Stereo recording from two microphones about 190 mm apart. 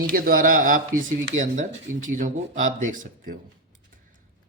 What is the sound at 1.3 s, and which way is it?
Speech, 90° right.